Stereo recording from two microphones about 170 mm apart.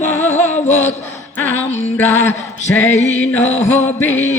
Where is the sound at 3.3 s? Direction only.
15° left (ahead or behind).